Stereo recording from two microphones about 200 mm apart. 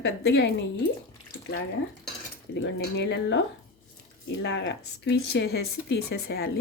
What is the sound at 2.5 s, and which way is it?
Speech, 55° left (ahead or behind).